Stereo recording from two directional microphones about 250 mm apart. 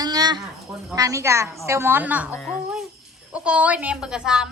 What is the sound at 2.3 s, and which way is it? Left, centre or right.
Speech, centre.